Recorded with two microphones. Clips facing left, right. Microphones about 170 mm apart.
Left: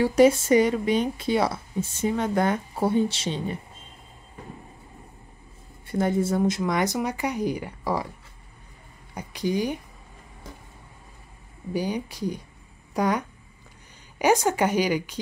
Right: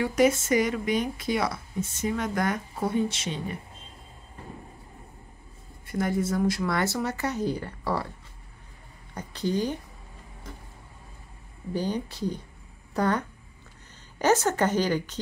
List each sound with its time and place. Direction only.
0.0 s speech: 30° left (ahead or behind)
5.9 s speech: 25° left (ahead or behind)
9.1 s speech: 10° left (ahead or behind)
11.7 s speech: 10° left (ahead or behind)